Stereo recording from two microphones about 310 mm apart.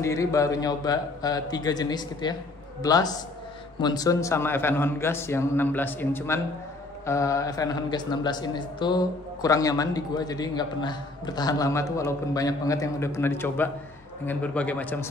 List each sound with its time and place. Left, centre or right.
0.0 s a man's voice: centre